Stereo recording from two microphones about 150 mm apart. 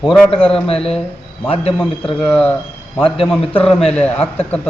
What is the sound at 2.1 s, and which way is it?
A man's voice, centre (ahead or behind).